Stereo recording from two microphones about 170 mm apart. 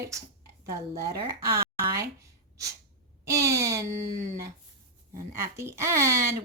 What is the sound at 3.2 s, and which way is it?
Speech, 20° right (ahead or behind).